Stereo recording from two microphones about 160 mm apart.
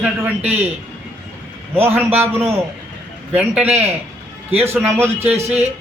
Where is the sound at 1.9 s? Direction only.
15° right (ahead or behind).